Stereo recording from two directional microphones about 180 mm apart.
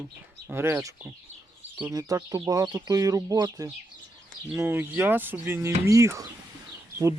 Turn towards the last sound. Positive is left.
turn(degrees=-15)  # may be behind; listen again after turning